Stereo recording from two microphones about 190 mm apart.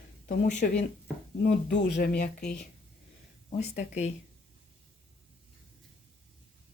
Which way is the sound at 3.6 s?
35° left (ahead or behind).